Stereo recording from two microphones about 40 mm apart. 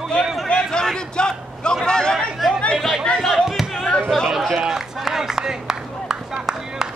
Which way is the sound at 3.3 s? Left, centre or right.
Centre.